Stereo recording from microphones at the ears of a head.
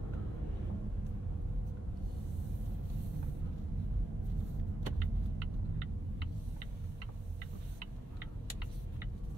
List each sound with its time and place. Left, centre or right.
4.1 s vehicle: right